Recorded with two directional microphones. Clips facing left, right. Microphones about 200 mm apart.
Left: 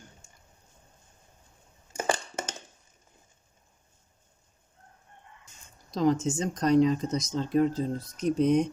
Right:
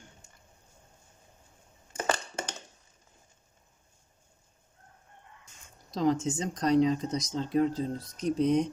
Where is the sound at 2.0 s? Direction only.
15° left (ahead or behind).